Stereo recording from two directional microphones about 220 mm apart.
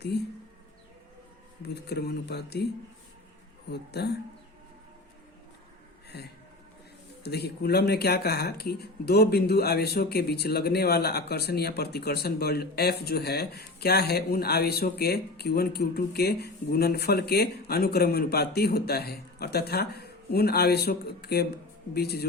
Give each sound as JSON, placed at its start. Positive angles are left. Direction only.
{"t": 0.1, "sound": "speech", "side_deg": 45}
{"t": 1.6, "sound": "speech", "side_deg": 50}
{"t": 3.7, "sound": "speech", "side_deg": 50}
{"t": 6.1, "sound": "speech", "side_deg": 45}